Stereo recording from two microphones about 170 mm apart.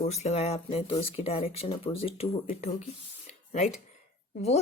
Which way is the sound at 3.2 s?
45° left (ahead or behind).